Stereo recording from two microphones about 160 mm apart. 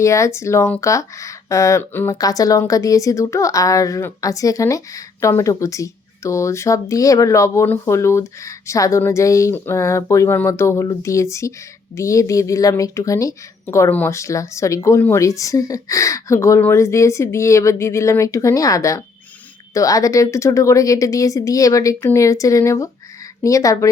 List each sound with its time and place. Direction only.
0.0 s speech: 20° left (ahead or behind)